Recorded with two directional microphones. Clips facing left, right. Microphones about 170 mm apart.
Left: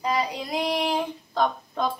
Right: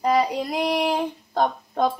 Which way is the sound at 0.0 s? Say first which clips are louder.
Right 6 dB; 50° right (ahead or behind).